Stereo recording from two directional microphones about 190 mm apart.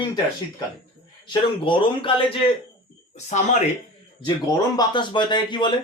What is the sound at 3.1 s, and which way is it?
Speech, 40° left (ahead or behind).